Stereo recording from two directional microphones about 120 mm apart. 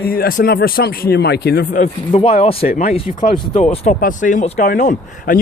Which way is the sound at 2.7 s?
70° left (ahead or behind).